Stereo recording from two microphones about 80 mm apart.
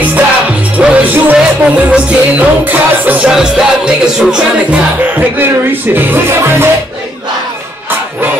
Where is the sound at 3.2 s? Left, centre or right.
Centre.